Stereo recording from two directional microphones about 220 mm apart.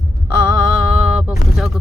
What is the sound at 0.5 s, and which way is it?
Mantra, centre (ahead or behind).